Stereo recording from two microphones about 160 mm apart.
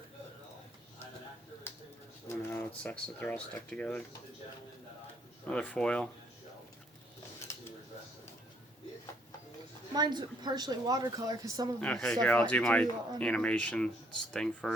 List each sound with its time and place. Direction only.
2.2 s pigeon: 20° left (ahead or behind)
2.8 s speech: 10° left (ahead or behind)
5.5 s speech: 5° left (ahead or behind)
7.5 s a sound: 15° left (ahead or behind)
9.9 s speech: 25° right (ahead or behind)
11.8 s speech: 5° left (ahead or behind)